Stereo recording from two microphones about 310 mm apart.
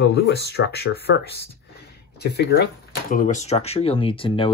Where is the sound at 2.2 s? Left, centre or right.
Left; by 4.5 s centre.